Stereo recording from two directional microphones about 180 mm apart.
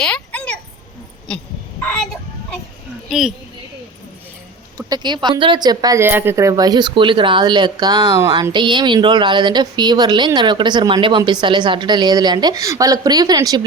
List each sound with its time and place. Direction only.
0.0 s a sound: 5° left (ahead or behind)
3.1 s a woman's voice: 5° right (ahead or behind)
4.9 s speech: 25° right (ahead or behind)